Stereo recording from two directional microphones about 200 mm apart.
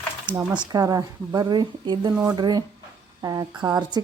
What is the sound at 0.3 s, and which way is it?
Speech, 20° right (ahead or behind).